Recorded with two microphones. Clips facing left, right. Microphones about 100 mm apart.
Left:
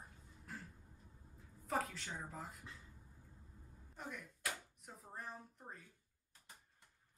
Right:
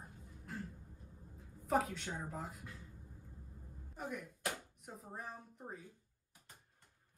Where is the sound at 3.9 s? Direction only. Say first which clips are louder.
Right 5 dB; 5° right (ahead or behind).